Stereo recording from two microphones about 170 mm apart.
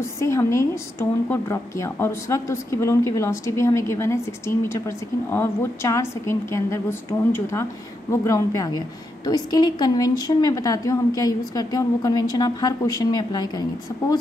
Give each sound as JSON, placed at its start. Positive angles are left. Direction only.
{"t": 0.0, "sound": "a woman's voice", "side_deg": 15}